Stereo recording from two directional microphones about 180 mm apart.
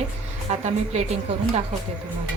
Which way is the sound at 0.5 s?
35° right (ahead or behind).